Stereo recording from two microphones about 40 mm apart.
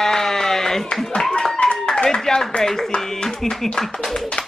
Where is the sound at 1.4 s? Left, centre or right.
Centre.